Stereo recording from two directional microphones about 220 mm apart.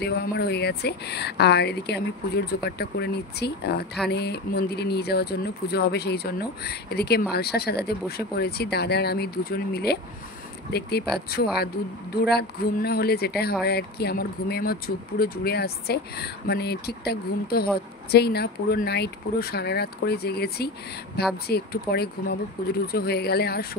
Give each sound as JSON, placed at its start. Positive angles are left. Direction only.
{"t": 0.0, "sound": "speech", "side_deg": 45}